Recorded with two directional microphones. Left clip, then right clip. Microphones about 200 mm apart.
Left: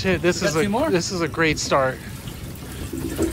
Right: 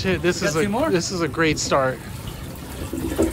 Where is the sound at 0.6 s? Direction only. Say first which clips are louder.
Even; 5° left (ahead or behind).